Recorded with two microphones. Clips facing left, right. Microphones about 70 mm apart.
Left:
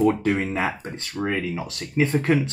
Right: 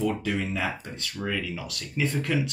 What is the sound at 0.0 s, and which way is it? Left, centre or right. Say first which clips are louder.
Speech: left 7 dB; left.